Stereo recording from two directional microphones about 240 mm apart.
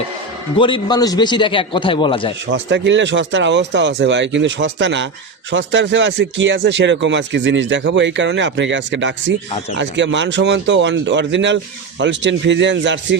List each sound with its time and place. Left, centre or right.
0.5 s a man's voice: centre
2.5 s speech: right